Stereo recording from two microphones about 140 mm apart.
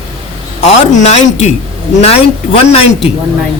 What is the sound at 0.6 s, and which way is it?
Speech, 50° left (ahead or behind).